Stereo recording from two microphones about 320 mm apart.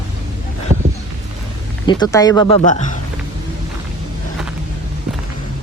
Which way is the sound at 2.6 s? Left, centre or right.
Left.